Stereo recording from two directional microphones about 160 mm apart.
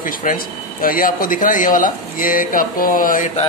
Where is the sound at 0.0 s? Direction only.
55° left (ahead or behind).